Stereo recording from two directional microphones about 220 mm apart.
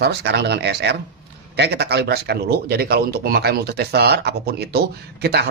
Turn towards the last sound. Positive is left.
turn(degrees=-45)  # may be behind; listen again after turning